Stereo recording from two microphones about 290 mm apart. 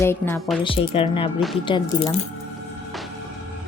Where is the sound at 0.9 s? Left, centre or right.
Centre.